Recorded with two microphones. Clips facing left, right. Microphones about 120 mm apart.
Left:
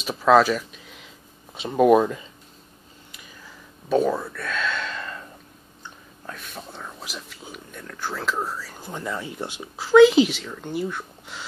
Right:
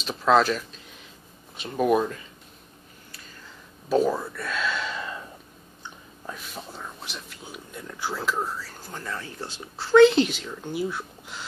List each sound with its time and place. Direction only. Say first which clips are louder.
0.0 s speech: left 3 dB; 5° left (ahead or behind)
1.7 s speech: left 6 dB; 25° left (ahead or behind)
3.9 s a sound: left 1 dB; centre (ahead or behind)
6.2 s whispering: even; 5° right (ahead or behind)
7.0 s a sound: left 2 dB; 5° left (ahead or behind)
7.8 s whispering: even; 15° right (ahead or behind)
8.1 s speech: left 1 dB; centre (ahead or behind)
8.6 s speech: left 4 dB; 15° left (ahead or behind)
9.8 s speech: left 2 dB; 5° left (ahead or behind)